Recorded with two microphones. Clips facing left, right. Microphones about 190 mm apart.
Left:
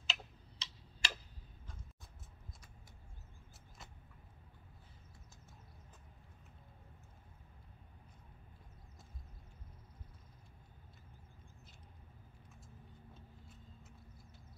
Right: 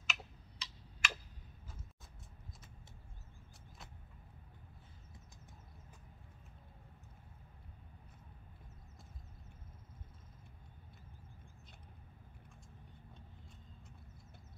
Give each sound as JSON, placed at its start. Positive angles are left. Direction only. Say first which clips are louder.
{"t": 0.0, "sound": "tick-tock", "louder": "even", "side_deg": 30}